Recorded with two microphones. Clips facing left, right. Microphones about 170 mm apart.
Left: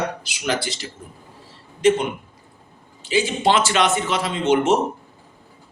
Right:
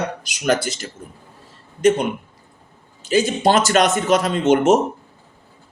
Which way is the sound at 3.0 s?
45° right (ahead or behind).